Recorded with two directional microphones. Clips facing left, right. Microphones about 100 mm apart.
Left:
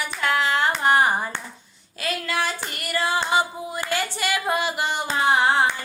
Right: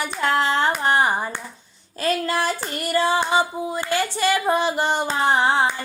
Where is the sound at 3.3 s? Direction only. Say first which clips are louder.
Right 2 dB; 25° right (ahead or behind).